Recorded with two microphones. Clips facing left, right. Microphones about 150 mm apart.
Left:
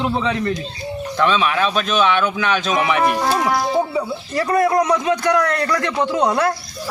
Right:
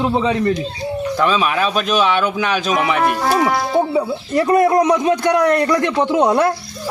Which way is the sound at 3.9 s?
25° right (ahead or behind).